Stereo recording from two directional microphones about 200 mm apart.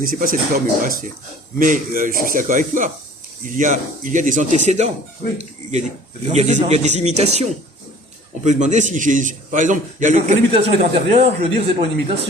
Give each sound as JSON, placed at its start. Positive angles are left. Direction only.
{"t": 0.0, "sound": "a man's voice", "side_deg": -45}
{"t": 6.2, "sound": "a man's voice", "side_deg": -35}
{"t": 8.4, "sound": "a man's voice", "side_deg": -35}